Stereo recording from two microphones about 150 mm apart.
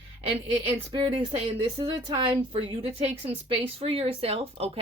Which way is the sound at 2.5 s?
40° right (ahead or behind).